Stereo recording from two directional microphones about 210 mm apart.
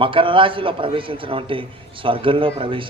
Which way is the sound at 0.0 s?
25° right (ahead or behind).